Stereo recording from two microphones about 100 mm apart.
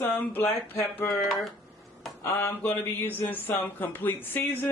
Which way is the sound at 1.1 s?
Centre (ahead or behind).